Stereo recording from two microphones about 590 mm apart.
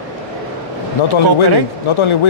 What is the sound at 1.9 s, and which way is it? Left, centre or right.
Speech, left.